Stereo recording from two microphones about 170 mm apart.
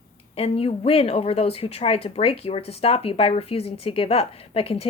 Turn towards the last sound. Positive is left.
turn(degrees=35)  # may be behind; listen again after turning